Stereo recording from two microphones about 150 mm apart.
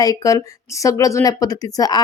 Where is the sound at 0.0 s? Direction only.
25° left (ahead or behind).